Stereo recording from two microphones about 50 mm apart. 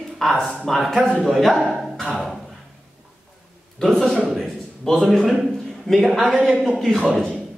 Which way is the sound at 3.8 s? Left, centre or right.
Centre.